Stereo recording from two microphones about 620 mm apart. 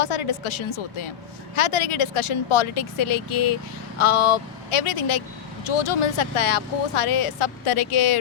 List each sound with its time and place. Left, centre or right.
0.0 s speech: left